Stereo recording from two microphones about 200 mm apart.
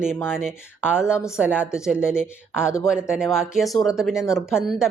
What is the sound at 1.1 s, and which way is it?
Speech, 15° left (ahead or behind).